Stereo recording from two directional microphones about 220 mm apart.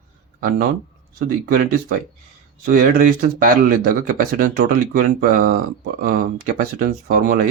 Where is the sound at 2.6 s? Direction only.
40° right (ahead or behind).